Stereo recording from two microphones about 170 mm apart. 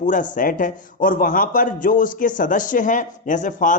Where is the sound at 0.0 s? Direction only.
50° left (ahead or behind).